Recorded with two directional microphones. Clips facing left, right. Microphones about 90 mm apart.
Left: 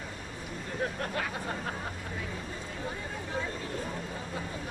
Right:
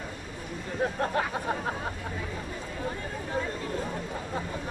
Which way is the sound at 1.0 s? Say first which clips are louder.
Right 6 dB; 30° right (ahead or behind).